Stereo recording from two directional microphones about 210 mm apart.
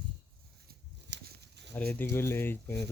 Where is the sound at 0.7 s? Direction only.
50° right (ahead or behind).